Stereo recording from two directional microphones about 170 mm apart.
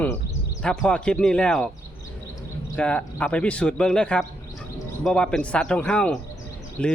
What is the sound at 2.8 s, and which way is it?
Speech, 5° left (ahead or behind).